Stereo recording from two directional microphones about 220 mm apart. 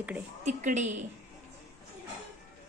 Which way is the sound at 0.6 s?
35° right (ahead or behind).